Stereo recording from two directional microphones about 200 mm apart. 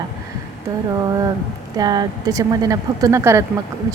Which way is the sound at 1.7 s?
20° right (ahead or behind).